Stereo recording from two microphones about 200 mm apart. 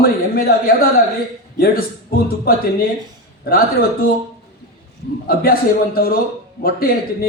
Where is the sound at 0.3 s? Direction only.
50° left (ahead or behind).